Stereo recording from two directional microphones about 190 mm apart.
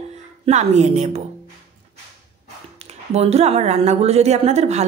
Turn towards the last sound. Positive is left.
turn(degrees=-35)  # may be behind; listen again after turning